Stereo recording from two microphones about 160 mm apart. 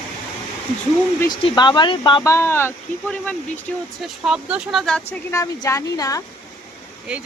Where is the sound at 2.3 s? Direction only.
15° left (ahead or behind).